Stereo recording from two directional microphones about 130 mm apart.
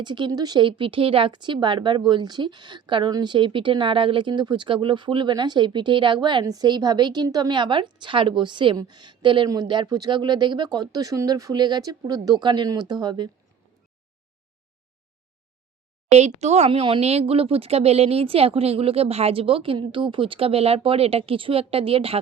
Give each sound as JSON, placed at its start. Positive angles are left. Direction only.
{"t": 0.0, "sound": "a woman's voice", "side_deg": -35}
{"t": 16.0, "sound": "speech", "side_deg": -60}